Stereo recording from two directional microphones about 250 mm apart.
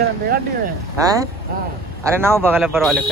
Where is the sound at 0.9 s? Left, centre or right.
Centre.